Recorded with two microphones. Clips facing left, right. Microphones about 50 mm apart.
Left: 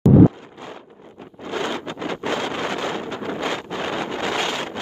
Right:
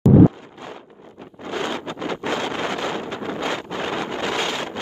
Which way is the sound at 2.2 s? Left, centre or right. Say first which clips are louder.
Even; left.